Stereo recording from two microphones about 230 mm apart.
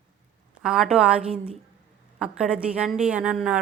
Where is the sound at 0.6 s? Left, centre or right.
Centre.